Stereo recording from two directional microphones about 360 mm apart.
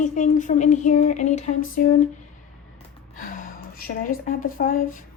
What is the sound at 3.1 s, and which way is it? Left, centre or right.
A woman's voice, left.